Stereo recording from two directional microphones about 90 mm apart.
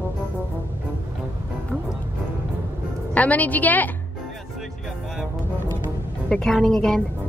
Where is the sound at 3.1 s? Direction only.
15° left (ahead or behind).